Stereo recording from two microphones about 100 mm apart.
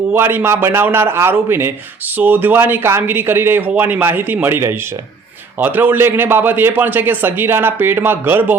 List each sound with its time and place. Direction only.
0.1 s a man's voice: 25° right (ahead or behind)